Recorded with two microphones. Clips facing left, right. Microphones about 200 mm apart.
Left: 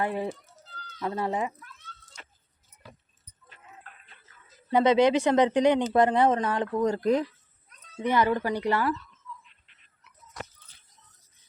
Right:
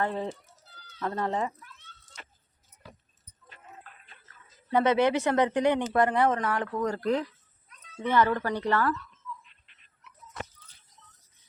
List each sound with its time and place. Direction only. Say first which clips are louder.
0.0 s speech: left 1 dB; 10° left (ahead or behind)
4.7 s speech: left 3 dB; 15° left (ahead or behind)